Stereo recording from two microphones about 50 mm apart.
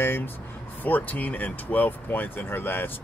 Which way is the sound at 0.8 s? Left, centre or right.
Left.